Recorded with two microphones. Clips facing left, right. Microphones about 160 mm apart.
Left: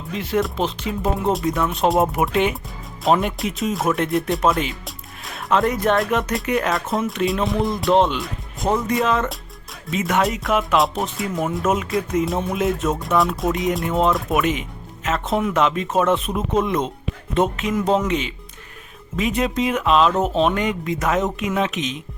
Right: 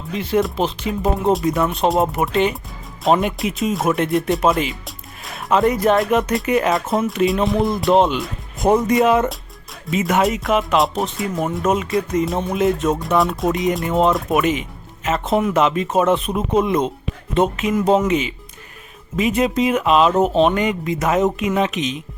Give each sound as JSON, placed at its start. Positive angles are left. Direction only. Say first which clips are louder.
{"t": 0.2, "sound": "speech", "louder": "right 3 dB", "side_deg": 0}
{"t": 8.6, "sound": "speech", "louder": "right 5 dB", "side_deg": -25}
{"t": 9.9, "sound": "speech", "louder": "right 3 dB", "side_deg": -5}